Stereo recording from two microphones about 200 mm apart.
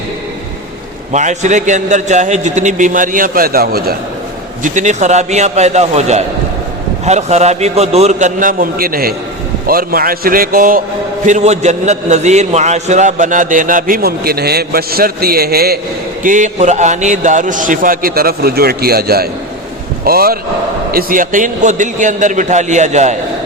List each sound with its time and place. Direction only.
1.1 s a man's voice: 35° right (ahead or behind)
4.6 s a man's voice: 35° right (ahead or behind)
16.2 s a man's voice: 40° right (ahead or behind)